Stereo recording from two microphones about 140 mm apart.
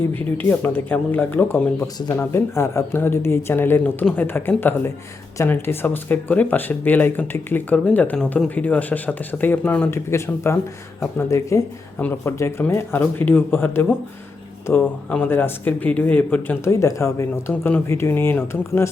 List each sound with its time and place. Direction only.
0.1 s speech: 15° left (ahead or behind)